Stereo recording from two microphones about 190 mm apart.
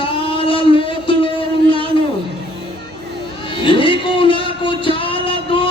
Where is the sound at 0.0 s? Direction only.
30° left (ahead or behind).